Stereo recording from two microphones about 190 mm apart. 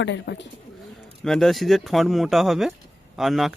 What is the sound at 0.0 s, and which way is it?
Speech, 70° left (ahead or behind).